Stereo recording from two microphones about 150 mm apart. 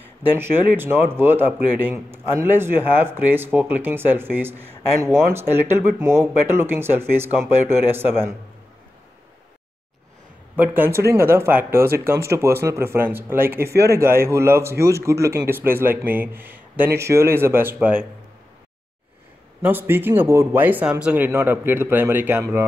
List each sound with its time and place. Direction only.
0.2 s a man's voice: 15° right (ahead or behind)
10.5 s a man's voice: 10° right (ahead or behind)
19.6 s a man's voice: 15° right (ahead or behind)